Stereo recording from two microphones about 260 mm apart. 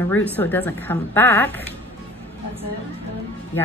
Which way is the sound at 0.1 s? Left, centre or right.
Centre.